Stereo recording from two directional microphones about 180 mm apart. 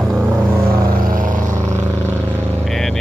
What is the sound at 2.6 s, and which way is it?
Vehicle, centre (ahead or behind).